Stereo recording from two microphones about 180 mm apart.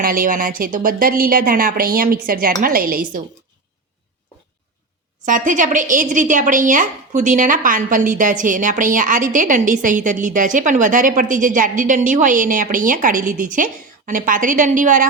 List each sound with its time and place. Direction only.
0.0 s a woman's voice: 50° right (ahead or behind)
5.2 s a woman's voice: 45° right (ahead or behind)